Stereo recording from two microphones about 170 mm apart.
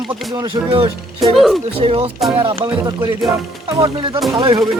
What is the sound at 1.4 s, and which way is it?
Speech, centre (ahead or behind).